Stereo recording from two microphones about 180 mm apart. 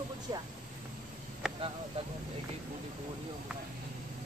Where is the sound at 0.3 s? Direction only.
20° right (ahead or behind).